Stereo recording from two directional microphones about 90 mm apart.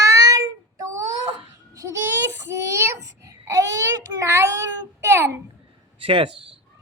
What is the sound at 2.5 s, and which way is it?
A child's voice, 30° right (ahead or behind).